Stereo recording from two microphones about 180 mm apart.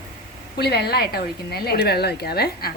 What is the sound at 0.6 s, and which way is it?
A woman's voice, 65° left (ahead or behind).